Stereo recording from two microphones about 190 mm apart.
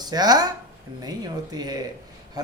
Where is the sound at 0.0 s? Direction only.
20° right (ahead or behind).